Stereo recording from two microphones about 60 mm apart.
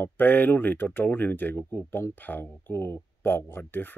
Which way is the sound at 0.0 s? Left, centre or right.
Left.